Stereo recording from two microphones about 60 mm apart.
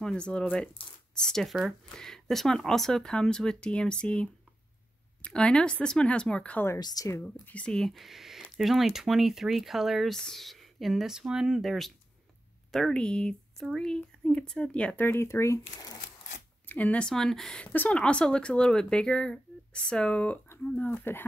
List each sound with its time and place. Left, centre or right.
0.0 s speech: centre
6.9 s speech: left
7.4 s speech: left
7.7 s speech: centre
10.1 s speech: centre
12.7 s speech: centre
15.0 s speech: left
15.2 s speech: left
16.6 s speech: left
17.1 s speech: centre
17.6 s speech: left
17.9 s speech: centre
20.9 s speech: left